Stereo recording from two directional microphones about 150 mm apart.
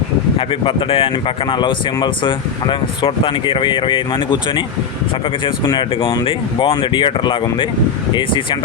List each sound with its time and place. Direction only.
0.3 s speech: 35° left (ahead or behind)
5.6 s speech: 30° left (ahead or behind)